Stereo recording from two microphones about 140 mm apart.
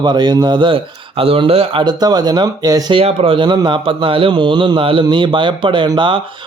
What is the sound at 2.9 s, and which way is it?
Speech, 40° right (ahead or behind).